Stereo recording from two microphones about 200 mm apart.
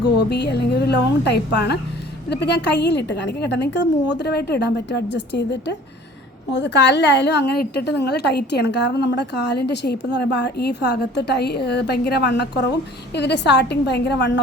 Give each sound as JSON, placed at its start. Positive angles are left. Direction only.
{"t": 0.0, "sound": "a woman's voice", "side_deg": 55}